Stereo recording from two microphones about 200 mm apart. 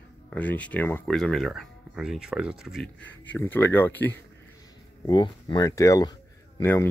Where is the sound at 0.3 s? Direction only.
5° left (ahead or behind).